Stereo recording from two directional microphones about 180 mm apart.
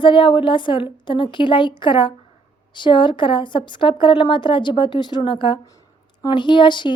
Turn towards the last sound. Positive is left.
turn(degrees=25)  # may be behind; listen again after turning